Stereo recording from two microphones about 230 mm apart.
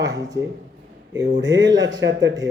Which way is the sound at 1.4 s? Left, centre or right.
Right.